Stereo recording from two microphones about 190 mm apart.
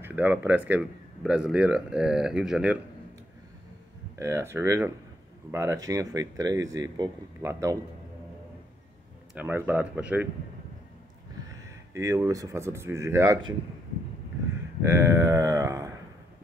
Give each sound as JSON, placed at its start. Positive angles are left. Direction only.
{"t": 0.0, "sound": "speech", "side_deg": -10}
{"t": 4.2, "sound": "speech", "side_deg": -15}
{"t": 9.3, "sound": "speech", "side_deg": -10}
{"t": 11.9, "sound": "speech", "side_deg": -15}
{"t": 14.8, "sound": "speech", "side_deg": -15}